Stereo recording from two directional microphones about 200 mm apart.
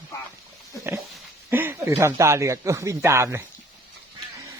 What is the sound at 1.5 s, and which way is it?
Speech, 10° right (ahead or behind).